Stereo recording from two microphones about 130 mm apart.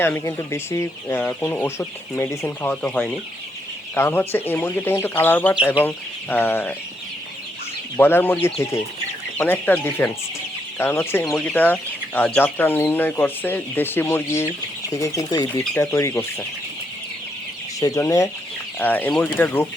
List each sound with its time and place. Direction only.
0.0 s speech: 20° left (ahead or behind)
7.9 s speech: 15° left (ahead or behind)
17.7 s chicken: 25° left (ahead or behind)
18.8 s speech: 15° left (ahead or behind)